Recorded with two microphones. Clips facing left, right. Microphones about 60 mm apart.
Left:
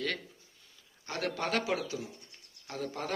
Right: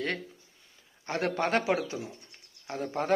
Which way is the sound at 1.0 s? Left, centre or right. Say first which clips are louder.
Right 5 dB; right.